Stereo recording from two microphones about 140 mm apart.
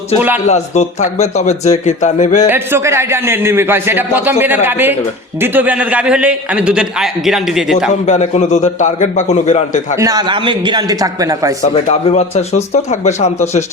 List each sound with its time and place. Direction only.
0.4 s speech: 55° left (ahead or behind)
2.5 s a man's voice: 20° right (ahead or behind); by 7.9 s 5° right (ahead or behind)
8.0 s speech: 55° left (ahead or behind)
10.0 s a man's voice: 30° right (ahead or behind)
11.9 s speech: 50° left (ahead or behind)